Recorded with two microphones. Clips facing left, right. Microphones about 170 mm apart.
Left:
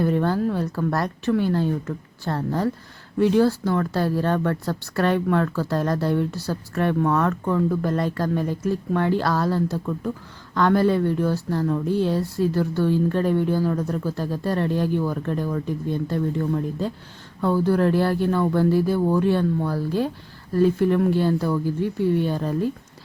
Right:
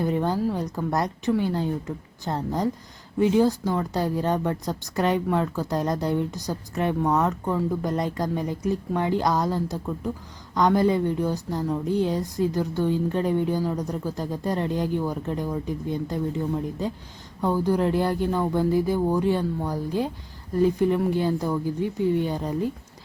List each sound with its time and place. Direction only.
0.0 s speech: 15° right (ahead or behind)